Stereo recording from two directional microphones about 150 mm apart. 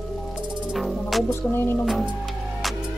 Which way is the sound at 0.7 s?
Centre (ahead or behind).